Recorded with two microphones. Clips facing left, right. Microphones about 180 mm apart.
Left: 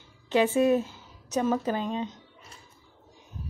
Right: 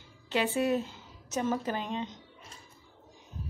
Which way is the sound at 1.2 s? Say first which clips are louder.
Left 5 dB; 15° left (ahead or behind).